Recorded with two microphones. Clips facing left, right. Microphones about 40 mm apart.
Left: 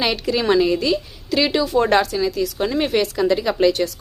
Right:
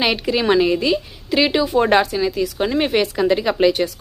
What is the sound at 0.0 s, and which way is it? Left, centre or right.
A woman's voice, right.